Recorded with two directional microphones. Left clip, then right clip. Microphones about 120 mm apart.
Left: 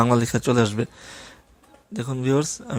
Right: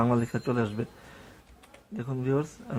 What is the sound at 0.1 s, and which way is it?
Speech, 35° left (ahead or behind).